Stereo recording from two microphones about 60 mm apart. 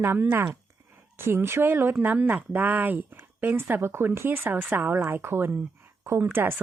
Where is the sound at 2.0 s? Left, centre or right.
Right.